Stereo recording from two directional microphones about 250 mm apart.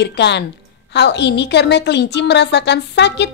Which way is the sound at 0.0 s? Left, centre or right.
Left.